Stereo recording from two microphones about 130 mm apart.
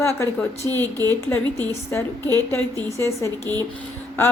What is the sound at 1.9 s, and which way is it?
A woman's voice, 15° left (ahead or behind).